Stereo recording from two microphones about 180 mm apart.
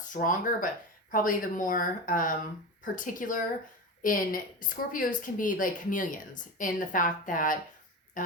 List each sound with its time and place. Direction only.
0.0 s a woman's voice: 45° left (ahead or behind)